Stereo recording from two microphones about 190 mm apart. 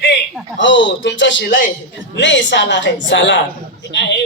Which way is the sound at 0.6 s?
75° left (ahead or behind).